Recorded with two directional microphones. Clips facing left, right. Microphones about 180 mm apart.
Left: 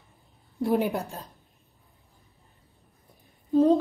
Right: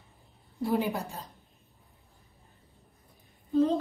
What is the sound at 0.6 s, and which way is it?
Speech, 60° left (ahead or behind).